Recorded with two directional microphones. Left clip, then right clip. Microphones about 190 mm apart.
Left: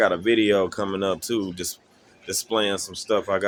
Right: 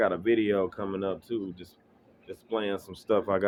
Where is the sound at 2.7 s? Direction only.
10° left (ahead or behind).